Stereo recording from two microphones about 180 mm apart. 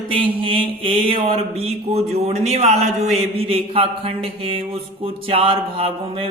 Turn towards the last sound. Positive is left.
turn(degrees=-30)  # may be behind; listen again after turning